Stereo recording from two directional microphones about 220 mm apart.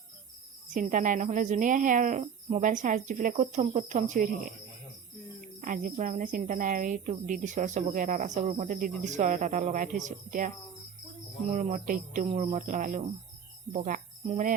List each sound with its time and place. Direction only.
0.7 s speech: 35° right (ahead or behind)
5.5 s speech: 35° right (ahead or behind)
11.5 s speech: 35° right (ahead or behind)